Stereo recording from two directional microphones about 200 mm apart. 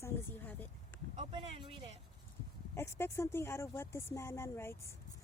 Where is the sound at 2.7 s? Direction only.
15° left (ahead or behind).